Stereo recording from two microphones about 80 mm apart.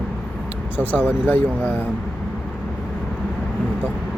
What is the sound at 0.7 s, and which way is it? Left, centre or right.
Speech, left.